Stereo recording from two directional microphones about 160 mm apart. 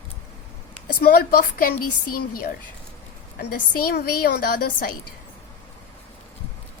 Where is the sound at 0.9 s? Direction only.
70° left (ahead or behind).